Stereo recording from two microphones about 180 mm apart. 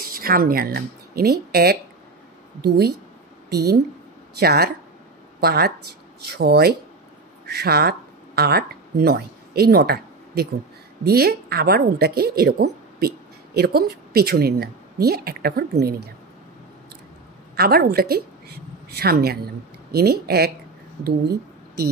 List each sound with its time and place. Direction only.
0.1 s a woman's voice: 55° right (ahead or behind)
17.6 s a woman's voice: 60° right (ahead or behind)